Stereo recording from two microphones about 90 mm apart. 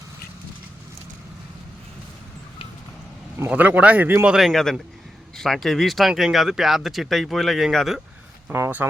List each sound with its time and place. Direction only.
3.5 s speech: 15° right (ahead or behind)
4.3 s speech: 5° right (ahead or behind)
8.5 s speech: 20° right (ahead or behind)